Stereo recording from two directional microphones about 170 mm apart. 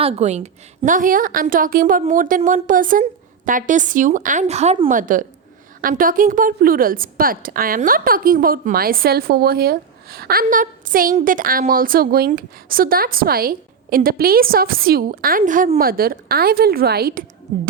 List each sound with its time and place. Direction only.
0.0 s a woman's voice: 40° right (ahead or behind); by 17.2 s 60° right (ahead or behind)